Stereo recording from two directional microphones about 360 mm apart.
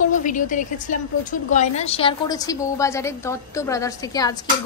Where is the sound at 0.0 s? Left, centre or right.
Left.